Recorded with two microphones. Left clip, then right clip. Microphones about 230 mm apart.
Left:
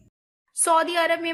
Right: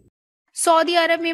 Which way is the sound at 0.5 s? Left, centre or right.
Right.